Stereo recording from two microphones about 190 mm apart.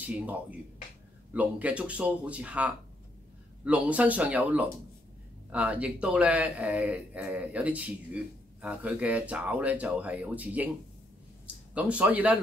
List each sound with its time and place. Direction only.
0.0 s a man's voice: 10° right (ahead or behind)
11.7 s a man's voice: 5° right (ahead or behind)